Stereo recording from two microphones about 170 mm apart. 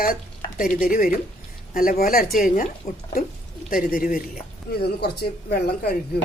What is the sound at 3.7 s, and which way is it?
Speech, 55° left (ahead or behind).